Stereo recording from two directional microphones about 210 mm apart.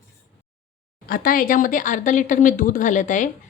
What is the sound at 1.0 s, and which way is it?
Speech, 45° left (ahead or behind).